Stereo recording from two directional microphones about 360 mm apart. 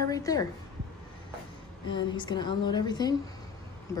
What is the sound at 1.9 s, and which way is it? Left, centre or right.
Speech, centre.